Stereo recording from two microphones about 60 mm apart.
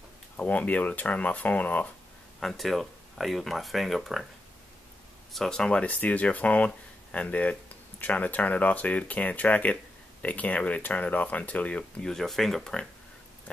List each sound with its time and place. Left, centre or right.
0.4 s speech: left
2.4 s speech: centre
5.3 s speech: centre; by 11.8 s left
12.0 s speech: centre